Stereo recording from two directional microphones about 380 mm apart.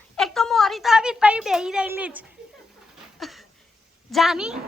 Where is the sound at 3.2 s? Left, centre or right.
Centre.